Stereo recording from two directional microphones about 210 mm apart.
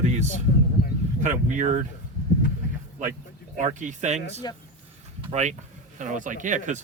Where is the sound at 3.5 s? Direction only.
35° right (ahead or behind).